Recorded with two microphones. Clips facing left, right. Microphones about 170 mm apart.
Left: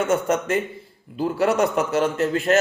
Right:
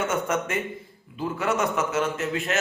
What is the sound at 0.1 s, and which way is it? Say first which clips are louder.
A man's voice: left 5 dB; 35° left (ahead or behind).